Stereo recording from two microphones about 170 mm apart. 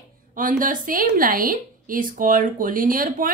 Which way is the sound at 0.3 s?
50° right (ahead or behind).